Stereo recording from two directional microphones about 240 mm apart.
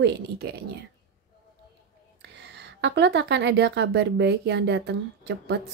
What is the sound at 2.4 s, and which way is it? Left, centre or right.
A woman's voice, right.